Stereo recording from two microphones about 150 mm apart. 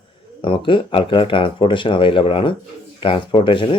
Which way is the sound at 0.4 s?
35° left (ahead or behind).